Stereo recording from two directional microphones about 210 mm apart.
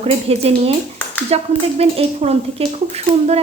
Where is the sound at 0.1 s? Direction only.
30° right (ahead or behind).